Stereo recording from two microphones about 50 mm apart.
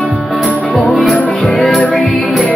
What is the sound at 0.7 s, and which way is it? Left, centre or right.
Music, centre.